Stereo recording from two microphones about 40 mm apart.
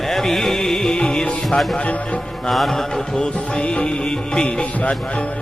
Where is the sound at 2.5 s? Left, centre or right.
Centre.